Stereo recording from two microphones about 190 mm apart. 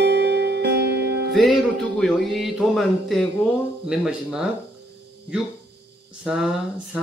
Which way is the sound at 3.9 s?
5° right (ahead or behind).